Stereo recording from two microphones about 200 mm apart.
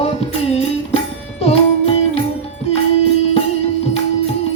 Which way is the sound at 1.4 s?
30° left (ahead or behind).